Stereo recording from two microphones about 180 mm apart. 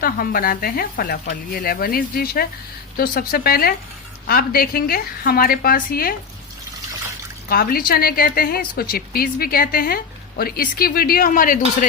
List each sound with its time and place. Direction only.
0.0 s a woman's voice: 55° left (ahead or behind)
7.5 s a woman's voice: 55° left (ahead or behind)